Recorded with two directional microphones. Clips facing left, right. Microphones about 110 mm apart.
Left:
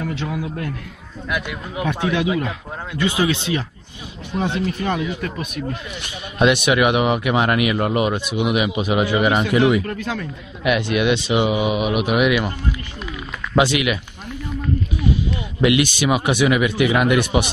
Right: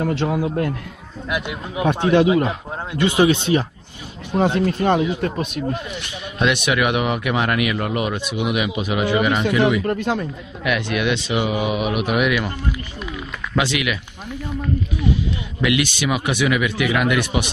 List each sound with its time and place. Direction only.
0.0 s speech: 40° right (ahead or behind)
1.3 s speech: 25° right (ahead or behind)
4.3 s speech: 40° right (ahead or behind)
6.4 s speech: 10° left (ahead or behind)
8.3 s speech: 10° left (ahead or behind)
9.8 s speech: 25° right (ahead or behind)
10.6 s speech: 10° left (ahead or behind)
13.6 s speech: 15° left (ahead or behind)
15.8 s speech: 20° left (ahead or behind)